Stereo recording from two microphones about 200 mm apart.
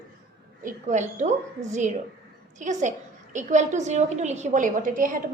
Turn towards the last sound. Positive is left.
turn(degrees=-40)  # may be behind; listen again after turning